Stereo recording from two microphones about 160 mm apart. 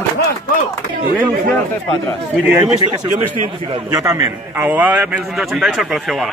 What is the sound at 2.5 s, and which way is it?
Speech, 10° right (ahead or behind).